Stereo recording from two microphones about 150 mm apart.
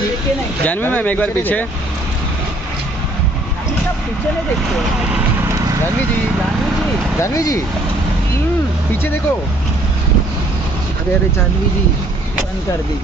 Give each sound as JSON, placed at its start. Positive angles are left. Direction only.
{"t": 0.7, "sound": "speech", "side_deg": 10}
{"t": 7.2, "sound": "speech", "side_deg": 20}
{"t": 8.9, "sound": "speech", "side_deg": 15}